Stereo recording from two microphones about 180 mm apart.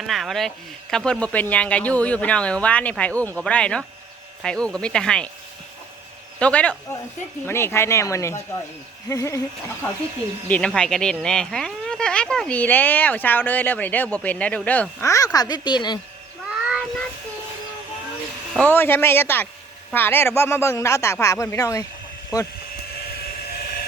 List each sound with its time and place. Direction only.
0.1 s speech: centre (ahead or behind)
6.4 s speech: 5° left (ahead or behind)
10.5 s speech: 5° left (ahead or behind); by 16.0 s 25° left (ahead or behind)
16.5 s child singing: 5° right (ahead or behind)
18.6 s speech: 10° left (ahead or behind)
23.0 s a sound: 55° left (ahead or behind)